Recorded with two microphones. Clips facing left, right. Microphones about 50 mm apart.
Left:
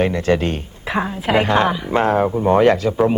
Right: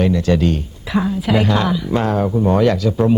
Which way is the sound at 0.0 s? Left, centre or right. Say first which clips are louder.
Right 1 dB; left.